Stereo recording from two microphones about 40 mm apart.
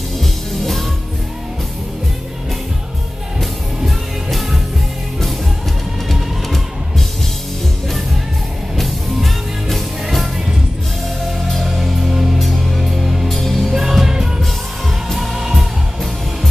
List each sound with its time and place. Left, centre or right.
0.2 s music: centre
3.3 s music: centre
6.0 s music: centre
8.7 s music: centre
11.4 s music: centre
11.7 s music: centre
13.3 s music: centre
13.7 s music: centre
15.3 s music: centre